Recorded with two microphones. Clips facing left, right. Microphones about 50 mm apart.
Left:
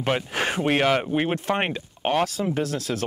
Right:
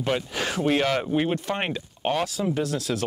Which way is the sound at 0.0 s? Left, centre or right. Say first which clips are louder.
Left 2 dB; left.